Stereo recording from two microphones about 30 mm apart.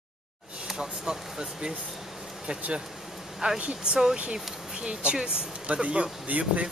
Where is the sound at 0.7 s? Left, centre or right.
Right.